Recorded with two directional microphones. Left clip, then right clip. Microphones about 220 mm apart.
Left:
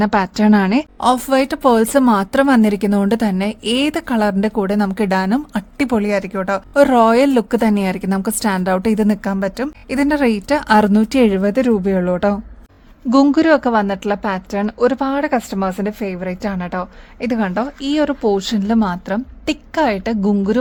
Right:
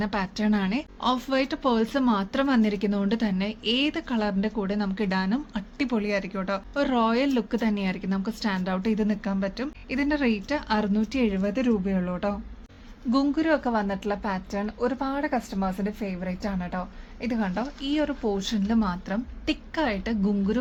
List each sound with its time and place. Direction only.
0.0 s a woman's voice: 55° left (ahead or behind)